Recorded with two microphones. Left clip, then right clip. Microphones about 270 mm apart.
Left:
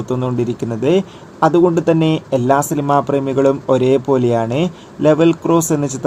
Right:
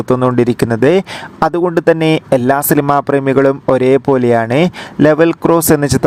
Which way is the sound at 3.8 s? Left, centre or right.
Right.